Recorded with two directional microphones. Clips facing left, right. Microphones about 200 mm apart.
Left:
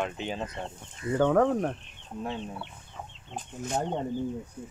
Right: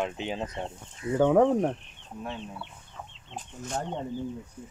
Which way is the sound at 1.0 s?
5° right (ahead or behind).